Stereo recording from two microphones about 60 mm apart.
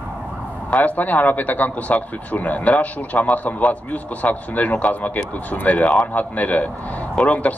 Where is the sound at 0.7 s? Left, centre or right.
Left.